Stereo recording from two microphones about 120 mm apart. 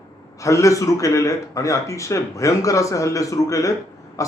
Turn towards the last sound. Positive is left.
turn(degrees=25)  # may be behind; listen again after turning